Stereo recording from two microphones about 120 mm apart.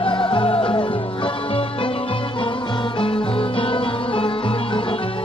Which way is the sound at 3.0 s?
45° left (ahead or behind).